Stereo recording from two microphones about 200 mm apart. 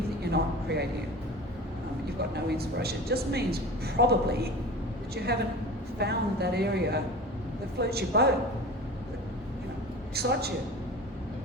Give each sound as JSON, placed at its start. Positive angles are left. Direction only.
{"t": 0.3, "sound": "speech", "side_deg": -55}
{"t": 2.3, "sound": "speech", "side_deg": -55}
{"t": 10.2, "sound": "speech", "side_deg": -50}